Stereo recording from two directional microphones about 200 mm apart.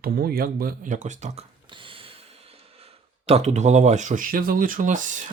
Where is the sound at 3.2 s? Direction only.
35° right (ahead or behind).